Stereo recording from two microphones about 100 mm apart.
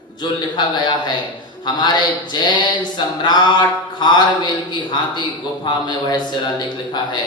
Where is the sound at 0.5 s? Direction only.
45° left (ahead or behind).